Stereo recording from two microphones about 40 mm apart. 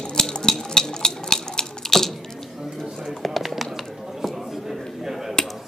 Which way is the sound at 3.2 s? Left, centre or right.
Centre.